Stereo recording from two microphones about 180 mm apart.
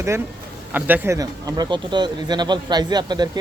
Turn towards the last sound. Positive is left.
turn(degrees=-25)  # may be behind; listen again after turning